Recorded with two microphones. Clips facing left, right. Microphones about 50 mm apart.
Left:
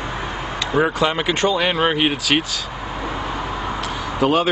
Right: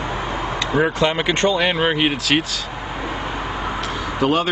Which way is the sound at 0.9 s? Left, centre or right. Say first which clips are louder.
Right 1 dB; centre.